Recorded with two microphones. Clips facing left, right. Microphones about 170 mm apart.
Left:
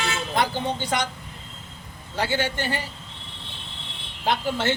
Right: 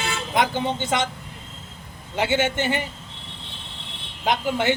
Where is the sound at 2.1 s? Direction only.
20° right (ahead or behind).